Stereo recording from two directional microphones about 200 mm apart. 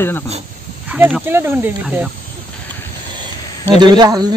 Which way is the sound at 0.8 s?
5° right (ahead or behind).